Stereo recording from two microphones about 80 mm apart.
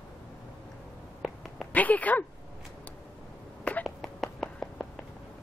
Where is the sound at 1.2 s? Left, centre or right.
Centre.